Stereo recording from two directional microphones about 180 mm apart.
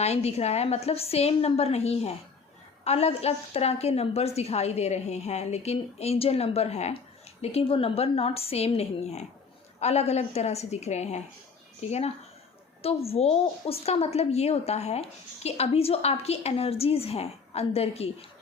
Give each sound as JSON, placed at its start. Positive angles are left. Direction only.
{"t": 0.0, "sound": "a woman's voice", "side_deg": 35}